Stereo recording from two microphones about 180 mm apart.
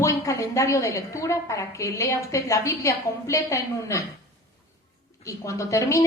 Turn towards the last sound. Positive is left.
turn(degrees=15)  # may be behind; listen again after turning